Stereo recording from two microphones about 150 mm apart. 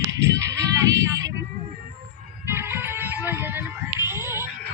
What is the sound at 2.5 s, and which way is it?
Music, 15° right (ahead or behind).